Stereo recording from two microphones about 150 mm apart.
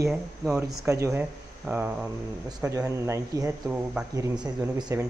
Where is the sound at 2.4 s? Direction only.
25° right (ahead or behind).